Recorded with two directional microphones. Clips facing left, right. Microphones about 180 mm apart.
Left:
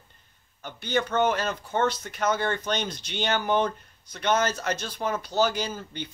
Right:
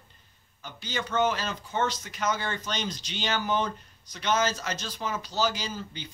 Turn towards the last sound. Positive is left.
turn(degrees=55)  # may be behind; listen again after turning